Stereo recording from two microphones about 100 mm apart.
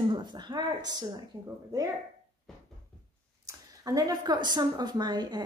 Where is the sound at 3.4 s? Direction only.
35° right (ahead or behind).